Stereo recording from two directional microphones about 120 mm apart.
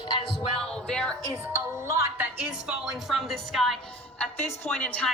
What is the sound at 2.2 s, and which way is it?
A woman's voice, 5° right (ahead or behind).